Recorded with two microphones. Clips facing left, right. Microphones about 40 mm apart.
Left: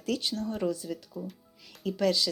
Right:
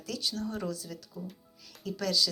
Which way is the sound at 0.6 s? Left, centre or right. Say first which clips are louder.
Left 6 dB; centre.